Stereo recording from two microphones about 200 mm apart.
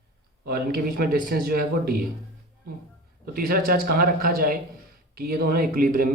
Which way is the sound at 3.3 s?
50° right (ahead or behind).